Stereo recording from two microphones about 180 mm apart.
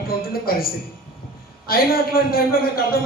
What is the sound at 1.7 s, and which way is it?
A man's voice, 55° left (ahead or behind).